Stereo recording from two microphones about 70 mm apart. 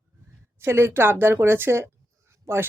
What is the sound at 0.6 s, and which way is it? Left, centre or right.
Speech, right.